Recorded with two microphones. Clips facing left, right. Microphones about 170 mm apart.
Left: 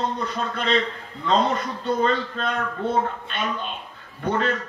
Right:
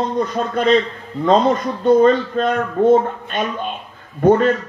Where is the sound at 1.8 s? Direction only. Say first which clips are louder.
Right 11 dB; 45° right (ahead or behind).